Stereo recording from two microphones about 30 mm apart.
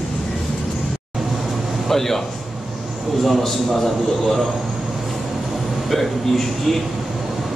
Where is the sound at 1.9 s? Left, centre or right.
Centre.